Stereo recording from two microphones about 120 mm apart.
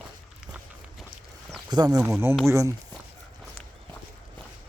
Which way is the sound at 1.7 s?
35° right (ahead or behind).